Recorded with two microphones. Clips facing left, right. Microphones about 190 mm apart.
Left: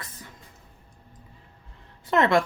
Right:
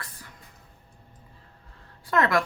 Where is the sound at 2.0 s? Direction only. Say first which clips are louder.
Left 3 dB; 25° left (ahead or behind).